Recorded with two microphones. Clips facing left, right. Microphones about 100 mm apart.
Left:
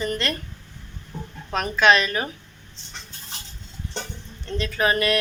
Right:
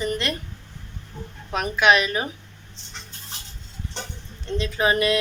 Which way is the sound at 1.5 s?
10° right (ahead or behind).